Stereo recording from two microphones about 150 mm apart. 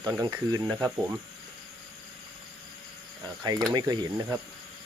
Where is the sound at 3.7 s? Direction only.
30° right (ahead or behind).